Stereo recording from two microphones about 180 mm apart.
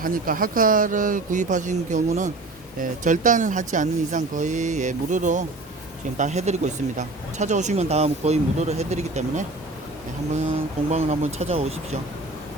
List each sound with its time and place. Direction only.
0.0 s speech: 50° right (ahead or behind)
10.9 s speech: 35° right (ahead or behind)